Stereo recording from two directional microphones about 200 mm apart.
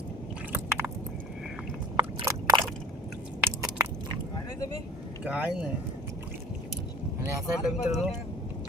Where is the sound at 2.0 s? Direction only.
20° right (ahead or behind).